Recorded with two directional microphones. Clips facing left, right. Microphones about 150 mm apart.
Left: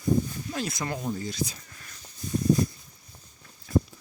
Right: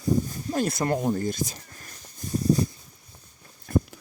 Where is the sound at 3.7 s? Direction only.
55° right (ahead or behind).